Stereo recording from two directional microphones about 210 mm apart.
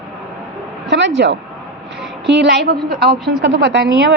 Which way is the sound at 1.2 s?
50° right (ahead or behind).